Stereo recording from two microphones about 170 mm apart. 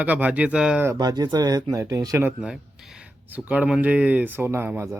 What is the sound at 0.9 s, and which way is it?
Speech, 25° right (ahead or behind).